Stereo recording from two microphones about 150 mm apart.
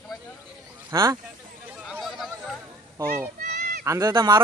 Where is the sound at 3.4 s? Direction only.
90° right.